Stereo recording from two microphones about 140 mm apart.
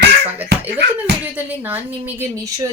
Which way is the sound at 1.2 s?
10° right (ahead or behind).